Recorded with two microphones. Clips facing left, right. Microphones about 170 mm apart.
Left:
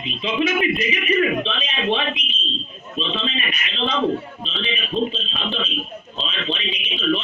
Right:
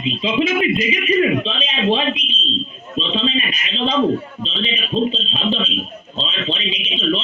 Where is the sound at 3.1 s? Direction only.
20° right (ahead or behind).